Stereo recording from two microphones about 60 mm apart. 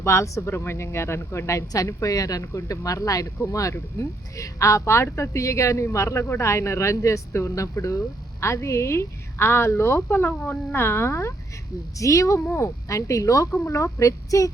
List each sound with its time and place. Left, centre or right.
0.0 s speech: left
1.7 s speech: left
11.9 s speech: left